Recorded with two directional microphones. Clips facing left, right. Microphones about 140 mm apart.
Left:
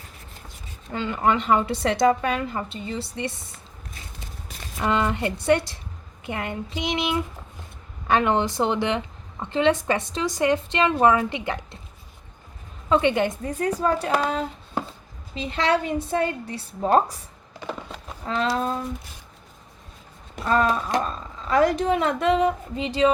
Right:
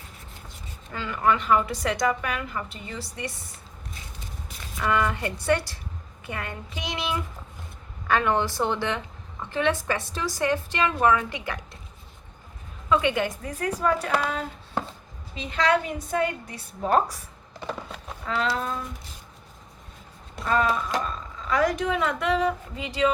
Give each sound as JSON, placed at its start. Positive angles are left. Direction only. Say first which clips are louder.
{"t": 0.9, "sound": "a woman's voice", "louder": "left 2 dB", "side_deg": 25}
{"t": 4.8, "sound": "a woman's voice", "louder": "left 2 dB", "side_deg": 25}
{"t": 12.9, "sound": "a woman's voice", "louder": "left 3 dB", "side_deg": 25}
{"t": 15.4, "sound": "a woman's voice", "louder": "left 1 dB", "side_deg": 30}
{"t": 17.7, "sound": "a sound", "louder": "left 1 dB", "side_deg": 0}
{"t": 18.4, "sound": "speech", "louder": "left 6 dB", "side_deg": 30}
{"t": 20.4, "sound": "a woman's voice", "louder": "left 2 dB", "side_deg": 40}